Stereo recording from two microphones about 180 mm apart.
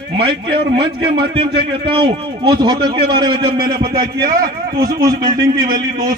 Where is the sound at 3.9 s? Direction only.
55° right (ahead or behind).